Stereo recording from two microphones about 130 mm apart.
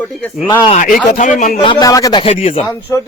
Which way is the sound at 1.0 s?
75° left (ahead or behind).